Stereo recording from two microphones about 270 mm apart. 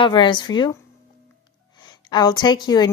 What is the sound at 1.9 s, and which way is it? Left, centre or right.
A woman's voice, centre.